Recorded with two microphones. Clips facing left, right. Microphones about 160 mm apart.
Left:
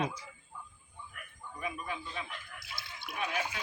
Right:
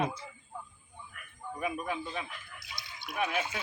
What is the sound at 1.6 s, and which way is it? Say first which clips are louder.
Speech: right 5 dB; 45° right (ahead or behind).